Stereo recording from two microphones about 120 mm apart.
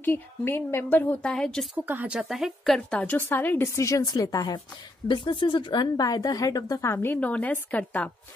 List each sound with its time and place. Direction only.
0.0 s a woman's voice: 15° left (ahead or behind)
1.3 s a woman's voice: 5° left (ahead or behind)
1.9 s speech: 15° right (ahead or behind)
2.1 s a woman's voice: centre (ahead or behind); by 4.6 s 30° left (ahead or behind)
5.0 s speech: 40° left (ahead or behind); by 8.1 s 15° left (ahead or behind)